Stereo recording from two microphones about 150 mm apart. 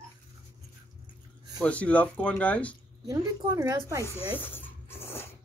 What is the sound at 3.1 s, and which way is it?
Speech, 20° right (ahead or behind).